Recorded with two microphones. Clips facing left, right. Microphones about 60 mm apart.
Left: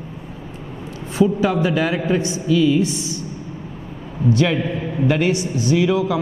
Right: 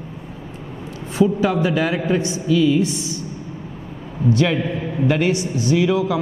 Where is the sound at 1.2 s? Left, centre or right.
Left.